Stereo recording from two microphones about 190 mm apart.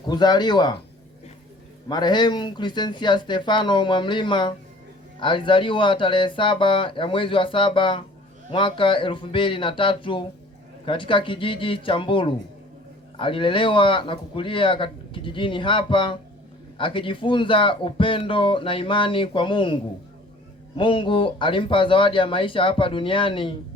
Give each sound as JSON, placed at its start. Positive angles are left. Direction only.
{"t": 0.1, "sound": "speech", "side_deg": 20}
{"t": 1.9, "sound": "speech", "side_deg": 25}